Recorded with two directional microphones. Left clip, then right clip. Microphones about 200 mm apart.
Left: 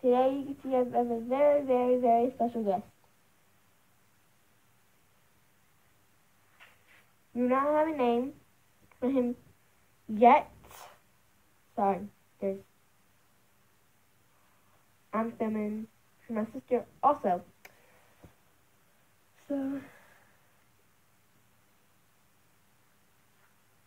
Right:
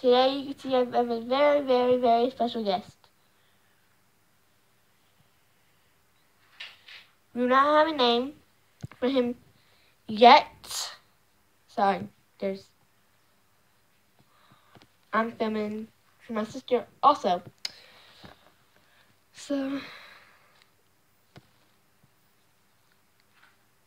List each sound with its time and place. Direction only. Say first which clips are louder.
0.0 s speech: right 4 dB; 15° right (ahead or behind)
7.3 s speech: right 6 dB; 15° right (ahead or behind)
8.8 s a sound: right 4 dB; 20° right (ahead or behind)
10.1 s a child's voice: right 5 dB; 20° right (ahead or behind)
11.7 s a sound: right 4 dB; 20° right (ahead or behind)
15.0 s speech: right 5 dB; 15° right (ahead or behind)
19.3 s speech: right 4 dB; 30° right (ahead or behind)